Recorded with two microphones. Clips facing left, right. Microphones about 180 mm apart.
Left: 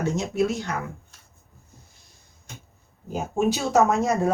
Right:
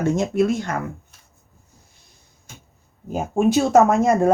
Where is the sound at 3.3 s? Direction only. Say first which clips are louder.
Right 6 dB; 55° right (ahead or behind).